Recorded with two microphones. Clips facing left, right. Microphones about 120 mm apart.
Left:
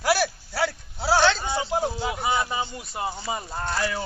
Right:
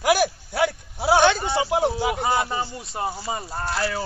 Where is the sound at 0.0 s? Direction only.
50° right (ahead or behind).